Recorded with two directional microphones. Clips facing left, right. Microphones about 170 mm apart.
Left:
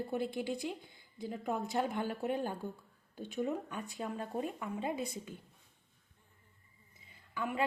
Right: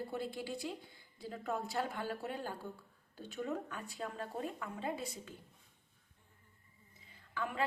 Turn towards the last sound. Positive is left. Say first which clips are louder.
# left 3 dB
turn(degrees=10)  # may be behind; listen again after turning